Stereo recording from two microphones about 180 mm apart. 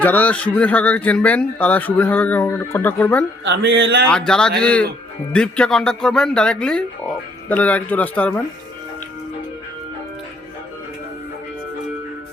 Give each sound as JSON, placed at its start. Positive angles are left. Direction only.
{"t": 0.0, "sound": "speech", "side_deg": 10}
{"t": 3.4, "sound": "speech", "side_deg": -90}
{"t": 4.3, "sound": "speech", "side_deg": 5}